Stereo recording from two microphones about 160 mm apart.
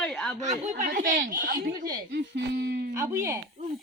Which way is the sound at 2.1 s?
90° right.